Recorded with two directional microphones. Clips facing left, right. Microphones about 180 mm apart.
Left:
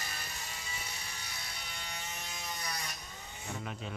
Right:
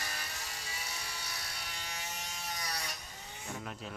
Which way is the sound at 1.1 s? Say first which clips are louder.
Right 2 dB; 80° right.